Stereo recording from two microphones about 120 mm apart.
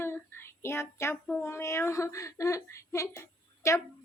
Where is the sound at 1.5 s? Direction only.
20° left (ahead or behind).